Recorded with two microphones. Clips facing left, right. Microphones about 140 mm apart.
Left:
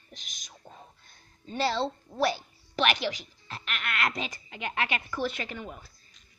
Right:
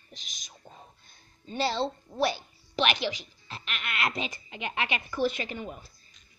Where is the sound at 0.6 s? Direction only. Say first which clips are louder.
Left 1 dB; 10° left (ahead or behind).